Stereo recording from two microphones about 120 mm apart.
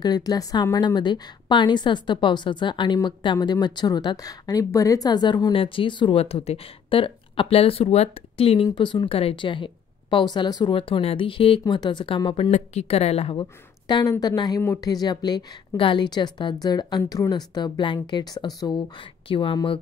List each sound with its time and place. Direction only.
0.0 s a woman's voice: 35° left (ahead or behind)
6.1 s a woman's voice: 55° left (ahead or behind)
12.4 s speech: 70° left (ahead or behind)
13.4 s a woman's voice: 35° left (ahead or behind)
17.0 s speech: 25° left (ahead or behind)
17.6 s a woman's voice: 40° left (ahead or behind)
19.2 s a woman's voice: 45° left (ahead or behind)